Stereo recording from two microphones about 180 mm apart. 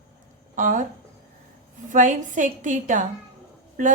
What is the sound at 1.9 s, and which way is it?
A woman's voice, 45° right (ahead or behind).